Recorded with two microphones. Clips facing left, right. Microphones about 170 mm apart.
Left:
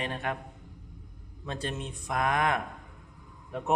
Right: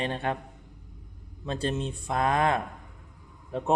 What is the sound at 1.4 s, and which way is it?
Speech, 30° right (ahead or behind).